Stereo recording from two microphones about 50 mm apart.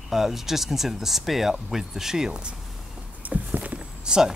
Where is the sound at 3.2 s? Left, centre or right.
Right.